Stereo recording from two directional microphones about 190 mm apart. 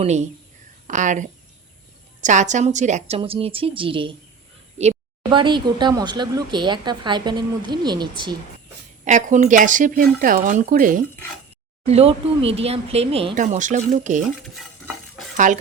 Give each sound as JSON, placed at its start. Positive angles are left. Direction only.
{"t": 0.0, "sound": "speech", "side_deg": -35}
{"t": 9.0, "sound": "speech", "side_deg": -40}
{"t": 11.9, "sound": "speech", "side_deg": -30}
{"t": 14.4, "sound": "a sound", "side_deg": 0}